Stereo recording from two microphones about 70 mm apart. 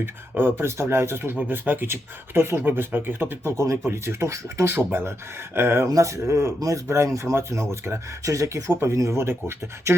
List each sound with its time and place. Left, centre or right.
0.0 s speech: right
3.6 s speech: right
5.9 s speech: right
6.6 s speech: right
6.8 s speech: right
8.7 s speech: right